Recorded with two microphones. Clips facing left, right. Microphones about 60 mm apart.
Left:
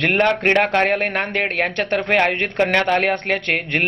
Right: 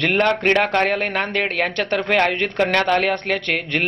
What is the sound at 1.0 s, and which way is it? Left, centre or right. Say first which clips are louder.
A man's voice: even; left.